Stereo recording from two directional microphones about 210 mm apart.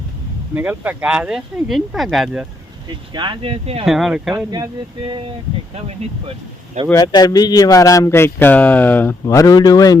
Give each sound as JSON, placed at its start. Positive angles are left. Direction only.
{"t": 0.5, "sound": "speech", "side_deg": -10}
{"t": 3.1, "sound": "speech", "side_deg": -20}
{"t": 3.8, "sound": "speech", "side_deg": 0}
{"t": 4.5, "sound": "speech", "side_deg": -20}
{"t": 6.9, "sound": "speech", "side_deg": 20}